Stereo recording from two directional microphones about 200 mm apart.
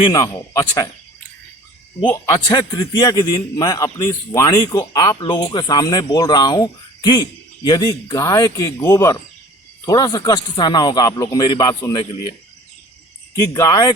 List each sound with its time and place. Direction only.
0.0 s a man's voice: 20° left (ahead or behind)
2.0 s a man's voice: 15° left (ahead or behind)
13.5 s speech: 20° left (ahead or behind)